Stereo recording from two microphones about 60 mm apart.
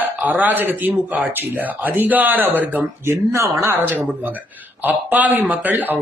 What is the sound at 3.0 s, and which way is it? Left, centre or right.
Speech, right.